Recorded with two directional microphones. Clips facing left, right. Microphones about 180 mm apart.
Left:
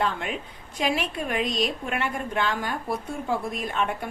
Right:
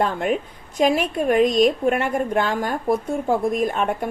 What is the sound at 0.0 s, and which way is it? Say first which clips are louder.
A woman's voice: right 7 dB; 45° right (ahead or behind).